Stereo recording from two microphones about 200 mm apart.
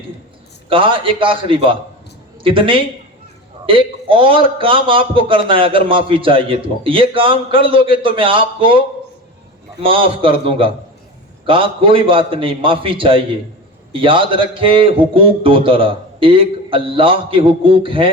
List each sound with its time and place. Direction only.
0.7 s a man's voice: 25° right (ahead or behind)
9.8 s a man's voice: 25° right (ahead or behind)